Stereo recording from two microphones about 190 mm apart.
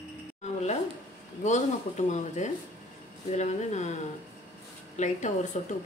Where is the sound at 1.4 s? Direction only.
40° left (ahead or behind).